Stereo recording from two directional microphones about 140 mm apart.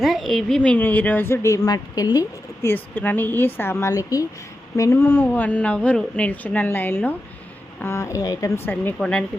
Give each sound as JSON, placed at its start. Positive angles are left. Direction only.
{"t": 0.0, "sound": "a woman's voice", "side_deg": 0}